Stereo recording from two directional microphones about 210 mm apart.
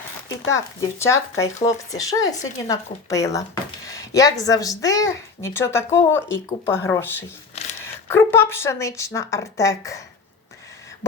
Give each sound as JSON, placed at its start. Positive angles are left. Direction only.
{"t": 0.5, "sound": "speech", "side_deg": 15}